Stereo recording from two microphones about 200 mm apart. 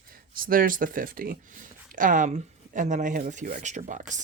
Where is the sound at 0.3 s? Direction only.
45° right (ahead or behind).